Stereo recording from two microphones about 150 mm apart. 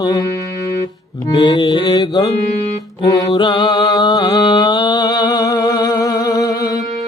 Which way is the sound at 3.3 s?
30° left (ahead or behind).